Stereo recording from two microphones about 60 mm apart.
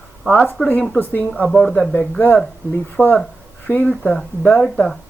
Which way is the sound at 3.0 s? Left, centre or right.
Left.